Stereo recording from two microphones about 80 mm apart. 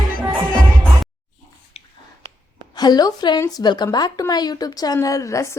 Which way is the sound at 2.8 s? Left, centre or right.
Left.